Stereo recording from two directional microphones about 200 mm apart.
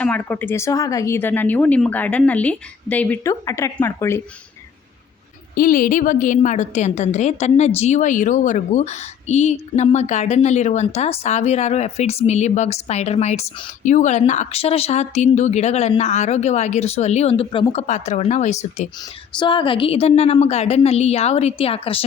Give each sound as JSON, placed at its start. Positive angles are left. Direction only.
{"t": 0.0, "sound": "a woman's voice", "side_deg": 10}
{"t": 5.5, "sound": "a woman's voice", "side_deg": 45}